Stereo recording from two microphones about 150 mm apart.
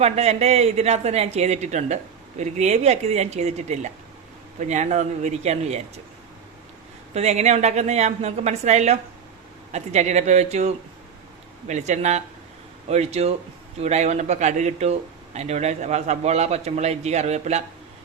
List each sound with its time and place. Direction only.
0.0 s a man's voice: 45° right (ahead or behind)
7.1 s a man's voice: 45° right (ahead or behind)